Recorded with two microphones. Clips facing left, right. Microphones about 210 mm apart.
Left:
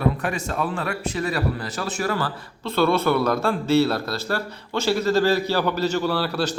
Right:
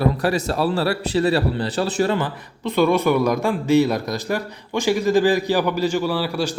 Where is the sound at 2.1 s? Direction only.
20° right (ahead or behind).